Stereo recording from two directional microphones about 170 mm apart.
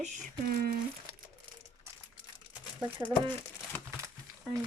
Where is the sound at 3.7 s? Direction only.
10° left (ahead or behind).